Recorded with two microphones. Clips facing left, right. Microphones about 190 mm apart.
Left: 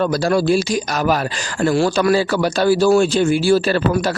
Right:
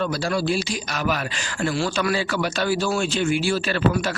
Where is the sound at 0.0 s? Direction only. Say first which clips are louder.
Left 7 dB; 45° left (ahead or behind).